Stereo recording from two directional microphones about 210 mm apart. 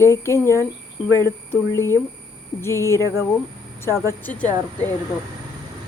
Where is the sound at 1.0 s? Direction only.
15° right (ahead or behind).